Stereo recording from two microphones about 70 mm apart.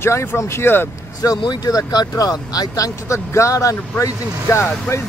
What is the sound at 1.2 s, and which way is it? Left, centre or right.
Speech, left.